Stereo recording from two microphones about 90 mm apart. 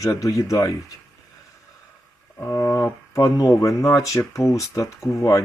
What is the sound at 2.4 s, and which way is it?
Speech, 30° left (ahead or behind).